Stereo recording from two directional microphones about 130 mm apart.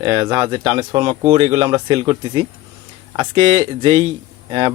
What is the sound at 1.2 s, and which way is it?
Speech, 55° right (ahead or behind).